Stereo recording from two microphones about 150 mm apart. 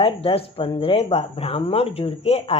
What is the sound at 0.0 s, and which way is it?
Speech, 40° left (ahead or behind).